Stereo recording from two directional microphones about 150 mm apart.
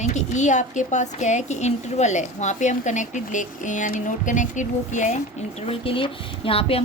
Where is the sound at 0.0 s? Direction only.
50° left (ahead or behind).